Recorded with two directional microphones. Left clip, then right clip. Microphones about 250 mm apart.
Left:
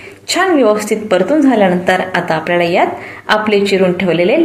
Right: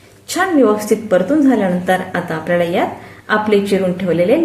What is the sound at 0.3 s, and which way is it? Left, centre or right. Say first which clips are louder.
A woman's voice: left 2 dB; centre.